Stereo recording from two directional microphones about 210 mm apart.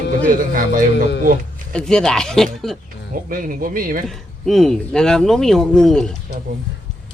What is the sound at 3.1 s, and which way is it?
Speech, 40° right (ahead or behind).